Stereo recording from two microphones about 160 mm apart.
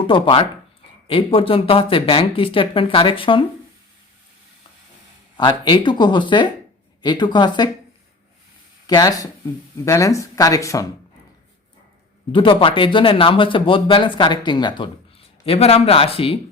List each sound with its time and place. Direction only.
0.1 s speech: 30° left (ahead or behind)
5.4 s speech: 30° left (ahead or behind)
8.9 s speech: 25° left (ahead or behind)
12.3 s speech: 30° left (ahead or behind)
15.4 s speech: 40° left (ahead or behind)